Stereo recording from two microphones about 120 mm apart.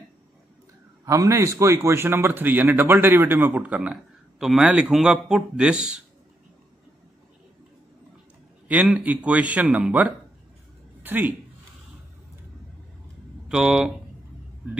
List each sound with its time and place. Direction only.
1.0 s a man's voice: 25° right (ahead or behind); by 6.0 s 5° right (ahead or behind)
8.6 s a man's voice: 15° right (ahead or behind)
13.5 s speech: 5° right (ahead or behind)